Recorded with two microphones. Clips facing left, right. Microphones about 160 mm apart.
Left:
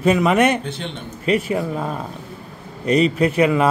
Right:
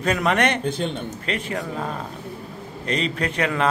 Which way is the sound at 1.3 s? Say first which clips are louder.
Left 9 dB; 10° left (ahead or behind).